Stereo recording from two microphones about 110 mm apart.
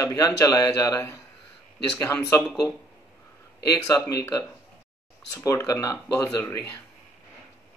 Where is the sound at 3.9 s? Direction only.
25° left (ahead or behind).